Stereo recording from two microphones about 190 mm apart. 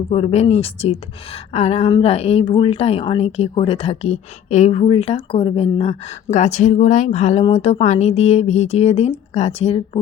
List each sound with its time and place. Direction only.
0.1 s a woman's voice: 30° left (ahead or behind)